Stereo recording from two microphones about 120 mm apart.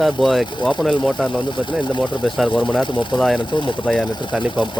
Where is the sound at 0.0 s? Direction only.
Centre (ahead or behind).